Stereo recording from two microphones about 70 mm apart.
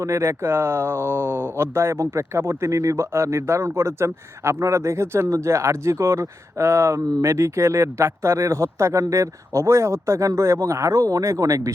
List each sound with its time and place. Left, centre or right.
0.0 s speech: right